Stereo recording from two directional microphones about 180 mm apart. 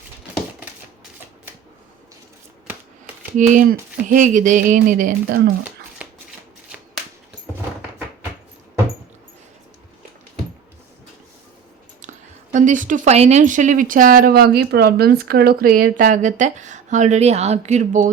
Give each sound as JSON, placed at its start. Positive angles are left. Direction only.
{"t": 3.3, "sound": "speech", "side_deg": -50}
{"t": 6.0, "sound": "shuffle", "side_deg": -10}
{"t": 12.5, "sound": "speech", "side_deg": -45}